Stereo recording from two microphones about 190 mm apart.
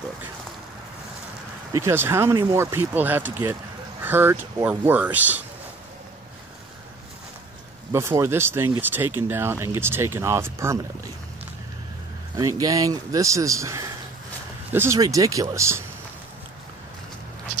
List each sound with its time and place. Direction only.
1.7 s speech: 15° right (ahead or behind)
7.9 s speech: 15° right (ahead or behind)
12.4 s speech: 20° right (ahead or behind)